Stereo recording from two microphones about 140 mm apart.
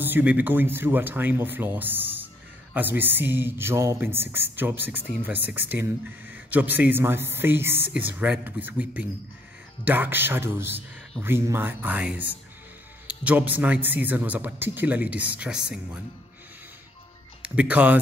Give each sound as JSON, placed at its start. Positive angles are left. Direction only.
{"t": 0.0, "sound": "speech", "side_deg": -10}
{"t": 17.4, "sound": "speech", "side_deg": -10}